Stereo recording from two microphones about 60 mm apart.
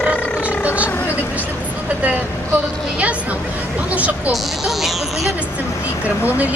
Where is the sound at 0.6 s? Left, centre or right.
Right.